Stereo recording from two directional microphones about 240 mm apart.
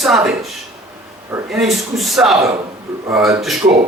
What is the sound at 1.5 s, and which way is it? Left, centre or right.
Speech, centre.